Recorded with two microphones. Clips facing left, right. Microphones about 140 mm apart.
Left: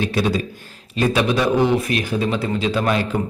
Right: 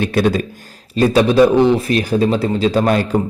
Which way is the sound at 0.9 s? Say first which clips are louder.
Right 7 dB; 35° right (ahead or behind).